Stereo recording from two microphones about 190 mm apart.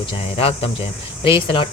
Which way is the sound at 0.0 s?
30° left (ahead or behind).